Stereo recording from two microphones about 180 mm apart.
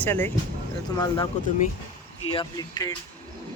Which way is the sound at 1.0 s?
20° left (ahead or behind).